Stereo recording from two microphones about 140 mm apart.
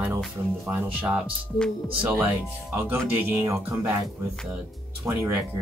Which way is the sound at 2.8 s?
15° right (ahead or behind).